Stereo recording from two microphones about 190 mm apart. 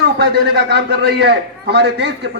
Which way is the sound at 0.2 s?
60° right (ahead or behind).